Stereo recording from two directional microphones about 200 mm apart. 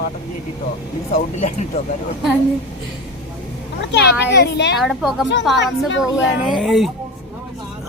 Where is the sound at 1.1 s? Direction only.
35° left (ahead or behind).